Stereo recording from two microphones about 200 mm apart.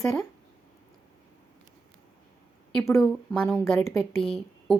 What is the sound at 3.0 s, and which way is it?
A woman's voice, centre (ahead or behind).